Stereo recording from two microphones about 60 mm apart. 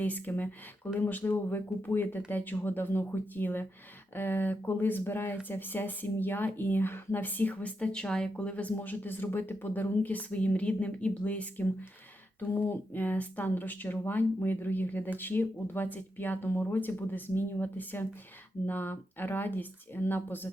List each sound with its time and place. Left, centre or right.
0.0 s speech: left